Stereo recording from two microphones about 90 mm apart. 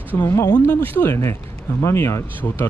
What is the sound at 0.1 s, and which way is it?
Speech, 25° left (ahead or behind).